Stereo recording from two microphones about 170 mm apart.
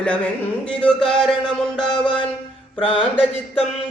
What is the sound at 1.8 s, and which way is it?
Music, 25° left (ahead or behind).